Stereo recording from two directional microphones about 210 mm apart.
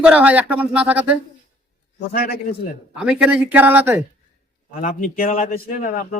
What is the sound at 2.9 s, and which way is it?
A man's voice, 5° right (ahead or behind).